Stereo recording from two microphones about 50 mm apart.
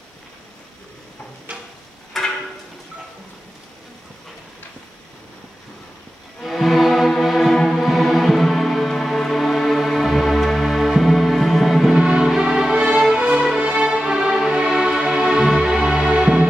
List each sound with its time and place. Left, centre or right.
1.5 s tick-tock: right
2.1 s a sound: centre
6.4 s music: centre
13.2 s music: right
13.5 s music: centre